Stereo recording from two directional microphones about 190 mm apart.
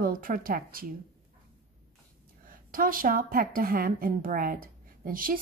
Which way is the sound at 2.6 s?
45° right (ahead or behind).